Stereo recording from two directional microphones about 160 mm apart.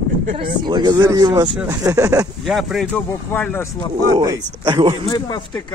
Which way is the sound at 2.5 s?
Centre (ahead or behind).